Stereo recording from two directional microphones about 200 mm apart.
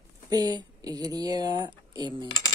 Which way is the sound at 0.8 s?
20° right (ahead or behind).